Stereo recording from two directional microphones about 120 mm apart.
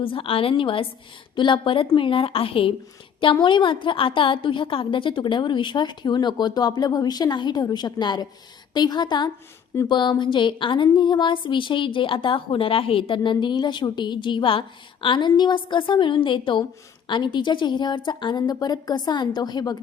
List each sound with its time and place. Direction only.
0.0 s a woman's voice: 50° left (ahead or behind)